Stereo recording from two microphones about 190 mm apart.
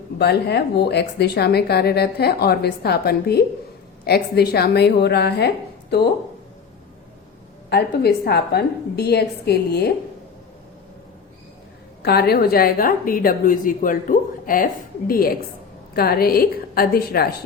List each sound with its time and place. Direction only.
0.2 s a woman's voice: 60° left (ahead or behind)
7.7 s a woman's voice: 55° left (ahead or behind)
12.0 s a woman's voice: 55° left (ahead or behind)